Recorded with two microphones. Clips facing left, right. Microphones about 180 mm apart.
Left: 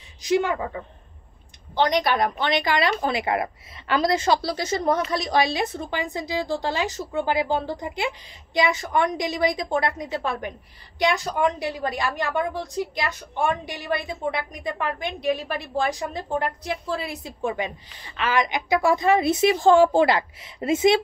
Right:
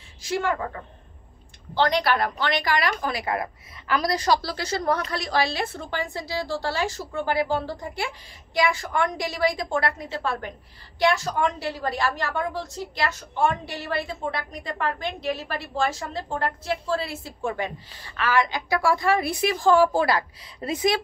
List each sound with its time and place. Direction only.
0.2 s a woman's voice: 15° left (ahead or behind)
1.8 s a woman's voice: 20° left (ahead or behind)